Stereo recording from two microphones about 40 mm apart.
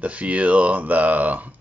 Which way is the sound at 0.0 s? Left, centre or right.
Right.